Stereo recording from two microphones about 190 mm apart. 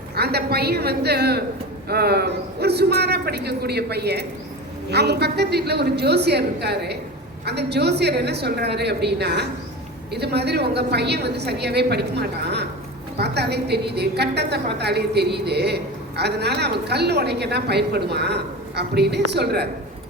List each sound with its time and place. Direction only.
0.2 s a woman's voice: 55° right (ahead or behind)